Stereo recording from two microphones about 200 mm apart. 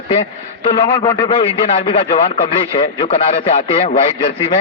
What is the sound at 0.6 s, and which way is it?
A man's voice, 20° left (ahead or behind).